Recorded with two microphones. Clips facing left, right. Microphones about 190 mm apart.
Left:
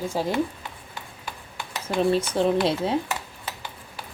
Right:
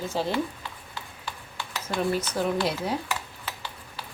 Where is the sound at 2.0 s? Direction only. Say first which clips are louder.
Left 5 dB; 25° left (ahead or behind).